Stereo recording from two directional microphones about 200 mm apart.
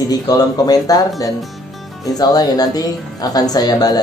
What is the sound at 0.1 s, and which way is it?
Speech, 20° left (ahead or behind).